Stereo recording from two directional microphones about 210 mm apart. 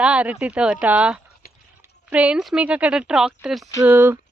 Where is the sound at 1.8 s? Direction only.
5° right (ahead or behind).